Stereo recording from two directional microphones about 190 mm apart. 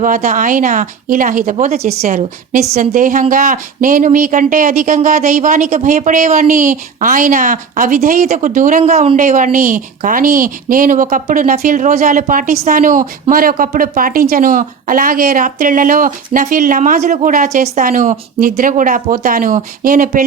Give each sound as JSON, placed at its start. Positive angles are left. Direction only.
{"t": 0.0, "sound": "a woman's voice", "side_deg": -45}
{"t": 8.8, "sound": "a woman's voice", "side_deg": -30}